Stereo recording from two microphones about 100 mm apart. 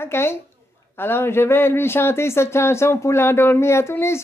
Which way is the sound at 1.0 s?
25° left (ahead or behind).